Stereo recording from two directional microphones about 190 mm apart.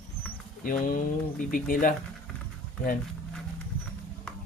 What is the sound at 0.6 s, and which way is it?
Speech, 45° left (ahead or behind).